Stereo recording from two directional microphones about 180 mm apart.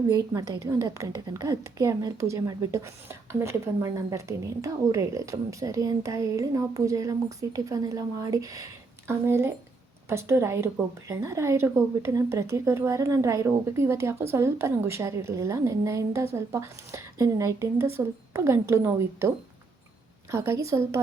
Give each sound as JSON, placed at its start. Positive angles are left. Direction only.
{"t": 0.1, "sound": "a woman's voice", "side_deg": -20}
{"t": 20.3, "sound": "a woman's voice", "side_deg": -15}